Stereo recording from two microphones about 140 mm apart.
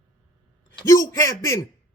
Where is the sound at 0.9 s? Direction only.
25° left (ahead or behind).